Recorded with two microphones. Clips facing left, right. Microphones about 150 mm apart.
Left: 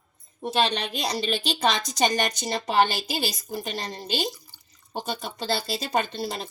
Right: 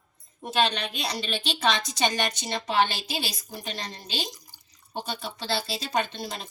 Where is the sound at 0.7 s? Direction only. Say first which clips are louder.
Left 3 dB; 35° left (ahead or behind).